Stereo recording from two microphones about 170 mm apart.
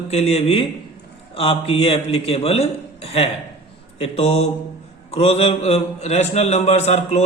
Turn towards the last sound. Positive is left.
turn(degrees=40)  # may be behind; listen again after turning